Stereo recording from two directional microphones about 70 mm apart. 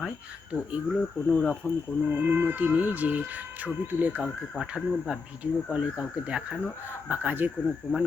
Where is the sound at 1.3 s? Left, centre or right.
Centre.